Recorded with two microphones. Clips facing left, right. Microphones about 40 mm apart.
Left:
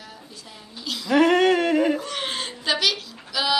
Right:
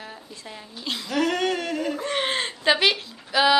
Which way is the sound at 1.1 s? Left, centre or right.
Centre.